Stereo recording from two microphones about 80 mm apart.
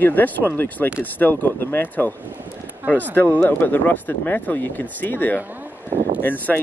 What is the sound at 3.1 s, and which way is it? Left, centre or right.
Speech, left.